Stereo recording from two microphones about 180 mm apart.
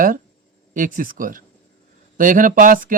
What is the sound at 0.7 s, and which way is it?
Speech, 45° right (ahead or behind).